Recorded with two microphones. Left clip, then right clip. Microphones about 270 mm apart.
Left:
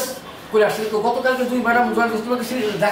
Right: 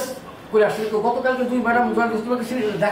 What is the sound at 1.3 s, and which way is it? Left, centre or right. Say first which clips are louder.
Speech: left 2 dB; centre.